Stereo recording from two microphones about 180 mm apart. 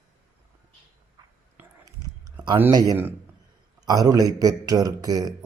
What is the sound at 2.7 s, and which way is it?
A man's voice, 20° right (ahead or behind).